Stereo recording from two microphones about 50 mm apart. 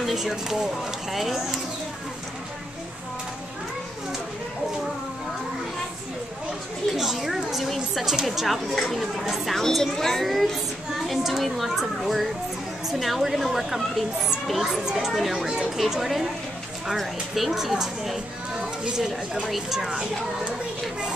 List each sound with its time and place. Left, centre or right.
0.0 s speech: centre
6.9 s a woman's voice: centre
9.6 s a woman's voice: centre
15.3 s speech: centre
15.9 s speech: centre